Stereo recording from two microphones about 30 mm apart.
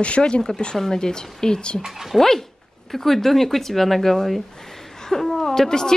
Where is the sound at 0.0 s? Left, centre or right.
Left.